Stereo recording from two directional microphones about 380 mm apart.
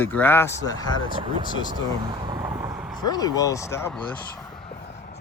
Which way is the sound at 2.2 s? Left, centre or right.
Centre.